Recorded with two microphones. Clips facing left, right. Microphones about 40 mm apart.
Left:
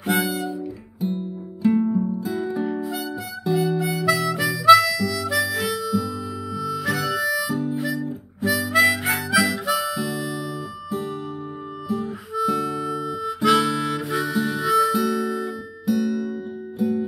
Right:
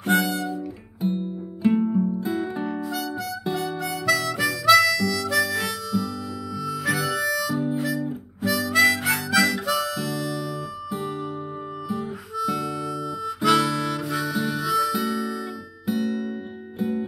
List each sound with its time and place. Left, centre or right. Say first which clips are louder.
0.0 s music: right 1 dB; centre
1.0 s music: right 1 dB; right
2.6 s music: left 2 dB; centre
3.5 s harmonica: left 9 dB; centre
7.7 s guitar: even; centre
8.4 s harmonica: left 1 dB; centre
10.1 s music: even; centre
12.4 s harmonica: left 3 dB; centre
15.9 s music: left 3 dB; right